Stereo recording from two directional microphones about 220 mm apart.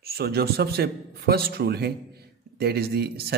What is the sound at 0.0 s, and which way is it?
A man's voice, 45° right (ahead or behind).